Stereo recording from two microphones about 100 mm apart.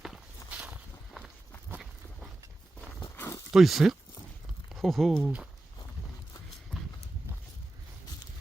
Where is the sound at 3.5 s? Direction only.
Centre (ahead or behind).